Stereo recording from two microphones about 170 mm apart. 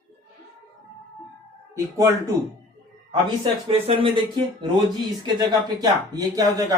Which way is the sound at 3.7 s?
30° right (ahead or behind).